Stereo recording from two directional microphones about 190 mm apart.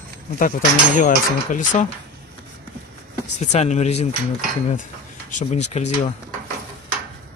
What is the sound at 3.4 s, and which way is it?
Speech, 35° left (ahead or behind).